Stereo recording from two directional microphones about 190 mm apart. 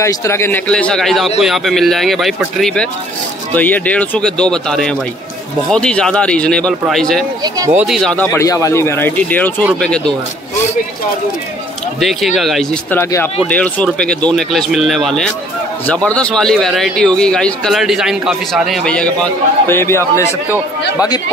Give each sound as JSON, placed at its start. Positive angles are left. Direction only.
{"t": 0.0, "sound": "a man's voice", "side_deg": 15}
{"t": 7.4, "sound": "speech", "side_deg": -20}
{"t": 7.7, "sound": "speech", "side_deg": 0}
{"t": 12.0, "sound": "a man's voice", "side_deg": 0}
{"t": 12.9, "sound": "a man's voice", "side_deg": 10}